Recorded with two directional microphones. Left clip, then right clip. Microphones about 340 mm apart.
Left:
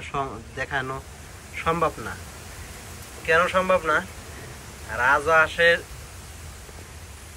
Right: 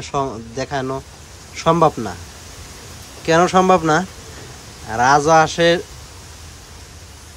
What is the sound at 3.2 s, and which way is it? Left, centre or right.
Speech, centre.